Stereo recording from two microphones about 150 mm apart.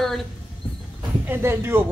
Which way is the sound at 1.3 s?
15° right (ahead or behind).